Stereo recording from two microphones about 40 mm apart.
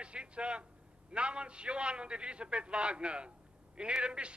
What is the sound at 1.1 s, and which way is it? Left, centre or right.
A man's voice, right.